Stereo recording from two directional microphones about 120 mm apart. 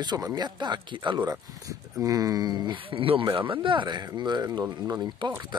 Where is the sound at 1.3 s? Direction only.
30° right (ahead or behind).